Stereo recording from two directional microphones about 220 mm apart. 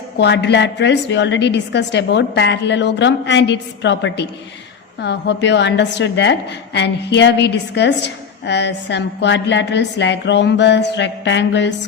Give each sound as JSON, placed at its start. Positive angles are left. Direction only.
{"t": 0.2, "sound": "a woman's voice", "side_deg": 50}